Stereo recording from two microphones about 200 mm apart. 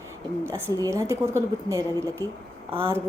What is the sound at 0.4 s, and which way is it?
A woman's voice, 15° right (ahead or behind).